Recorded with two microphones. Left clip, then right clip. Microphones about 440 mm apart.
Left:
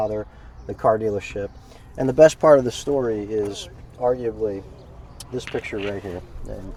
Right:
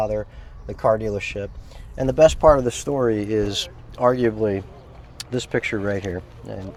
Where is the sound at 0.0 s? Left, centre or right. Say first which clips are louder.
Right 1 dB; right.